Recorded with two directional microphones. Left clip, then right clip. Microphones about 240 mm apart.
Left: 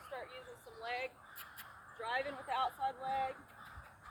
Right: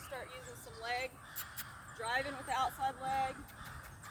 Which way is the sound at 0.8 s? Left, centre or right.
Centre.